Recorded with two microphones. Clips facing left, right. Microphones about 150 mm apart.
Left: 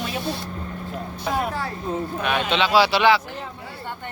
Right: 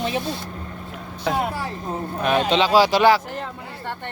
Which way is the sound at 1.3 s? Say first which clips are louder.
Right 2 dB; 80° right.